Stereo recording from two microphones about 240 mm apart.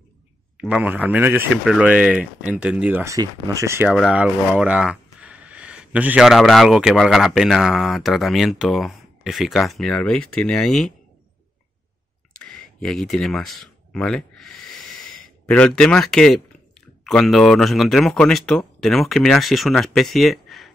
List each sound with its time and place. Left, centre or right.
0.6 s speech: centre
12.4 s a sound: centre
15.4 s speech: centre